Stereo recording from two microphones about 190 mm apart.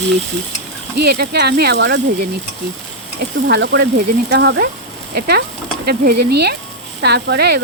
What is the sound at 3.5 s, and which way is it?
Speech, 65° right (ahead or behind).